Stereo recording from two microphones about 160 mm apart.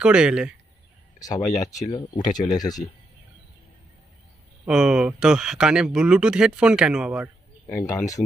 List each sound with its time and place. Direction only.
0.0 s speech: 5° right (ahead or behind)
1.2 s speech: 20° left (ahead or behind)
4.6 s speech: 5° right (ahead or behind)
7.6 s speech: 20° left (ahead or behind)